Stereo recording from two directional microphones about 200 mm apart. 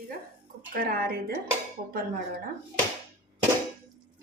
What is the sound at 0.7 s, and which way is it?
Speech, 50° right (ahead or behind).